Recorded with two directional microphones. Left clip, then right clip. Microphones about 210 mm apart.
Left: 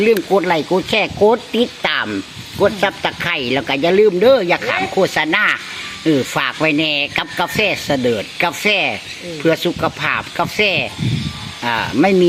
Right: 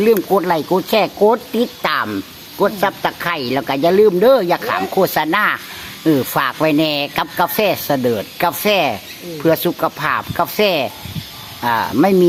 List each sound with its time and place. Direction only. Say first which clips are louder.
0.0 s speech: even; 5° right (ahead or behind)